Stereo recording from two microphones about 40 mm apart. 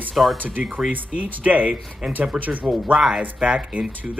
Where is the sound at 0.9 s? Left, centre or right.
Right.